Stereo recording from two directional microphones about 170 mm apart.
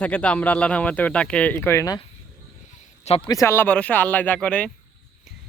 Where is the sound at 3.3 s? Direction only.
15° left (ahead or behind).